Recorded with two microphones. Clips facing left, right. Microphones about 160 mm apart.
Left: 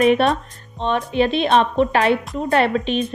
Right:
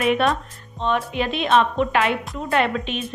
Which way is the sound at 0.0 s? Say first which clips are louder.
Left 4 dB; 35° left (ahead or behind).